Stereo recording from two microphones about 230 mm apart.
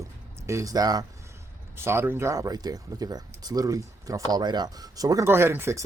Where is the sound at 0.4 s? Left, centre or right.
Centre.